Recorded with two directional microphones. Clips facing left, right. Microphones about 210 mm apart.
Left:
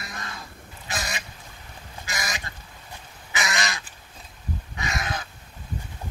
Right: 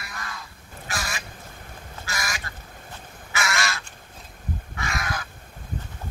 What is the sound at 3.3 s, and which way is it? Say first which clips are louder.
Crow: right 1 dB; 20° left (ahead or behind).